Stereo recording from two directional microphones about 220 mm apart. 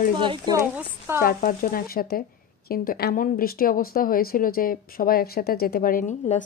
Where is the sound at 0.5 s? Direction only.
10° right (ahead or behind).